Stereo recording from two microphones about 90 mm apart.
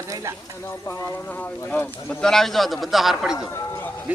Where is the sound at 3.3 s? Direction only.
40° left (ahead or behind).